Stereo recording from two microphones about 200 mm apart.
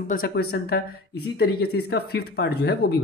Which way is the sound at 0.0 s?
45° left (ahead or behind).